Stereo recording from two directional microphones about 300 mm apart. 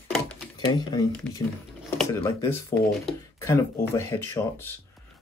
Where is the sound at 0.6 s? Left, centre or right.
Centre.